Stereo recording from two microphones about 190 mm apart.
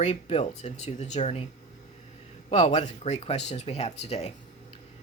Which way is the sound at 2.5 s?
35° left (ahead or behind).